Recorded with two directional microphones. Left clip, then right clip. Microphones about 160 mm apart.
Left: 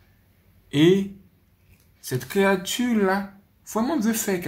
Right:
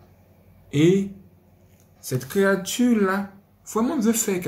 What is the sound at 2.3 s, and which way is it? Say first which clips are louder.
Speech: even; 55° left (ahead or behind).